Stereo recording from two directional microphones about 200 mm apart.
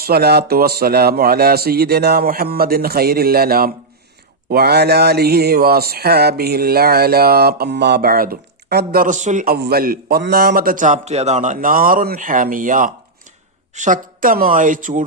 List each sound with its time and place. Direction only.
0.0 s mantra: 50° right (ahead or behind)
13.7 s speech: 40° right (ahead or behind)